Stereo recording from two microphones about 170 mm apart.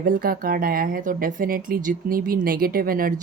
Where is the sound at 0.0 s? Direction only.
55° right (ahead or behind).